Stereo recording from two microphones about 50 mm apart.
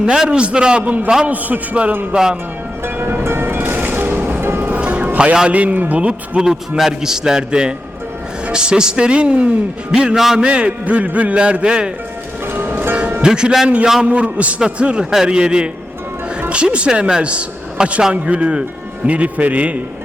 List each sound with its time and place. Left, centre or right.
0.0 s a man's voice: centre
0.8 s a man's voice: right
2.1 s a man's voice: centre
2.8 s harp: right
3.2 s music: right
4.4 s music: right
4.7 s music: right
5.5 s a man's voice: right
6.4 s a man's voice: centre
12.5 s music: right
13.2 s a man's voice: centre
14.0 s a man's voice: right